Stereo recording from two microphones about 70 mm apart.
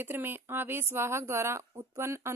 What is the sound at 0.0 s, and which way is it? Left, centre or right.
Speech, right.